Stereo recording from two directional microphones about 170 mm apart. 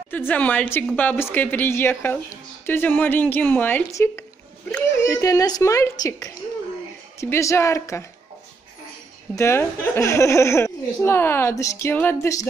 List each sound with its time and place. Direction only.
0.1 s a woman's voice: 10° left (ahead or behind)
9.3 s a woman's voice: 15° left (ahead or behind)